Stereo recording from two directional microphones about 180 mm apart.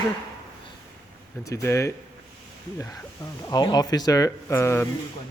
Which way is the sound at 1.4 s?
15° left (ahead or behind).